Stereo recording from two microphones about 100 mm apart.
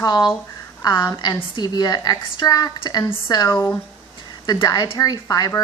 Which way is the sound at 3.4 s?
30° left (ahead or behind).